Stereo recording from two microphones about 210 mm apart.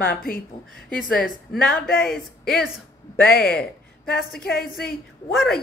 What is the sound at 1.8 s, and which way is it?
Speech, 45° left (ahead or behind).